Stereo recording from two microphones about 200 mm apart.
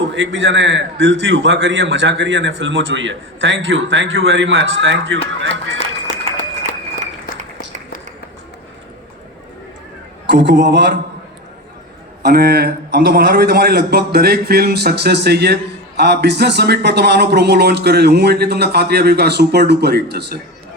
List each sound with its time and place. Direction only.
0.1 s a man's voice: 70° right (ahead or behind)
6.1 s a sound: 40° left (ahead or behind)
10.2 s speech: 60° right (ahead or behind)
12.2 s a man's voice: 50° right (ahead or behind)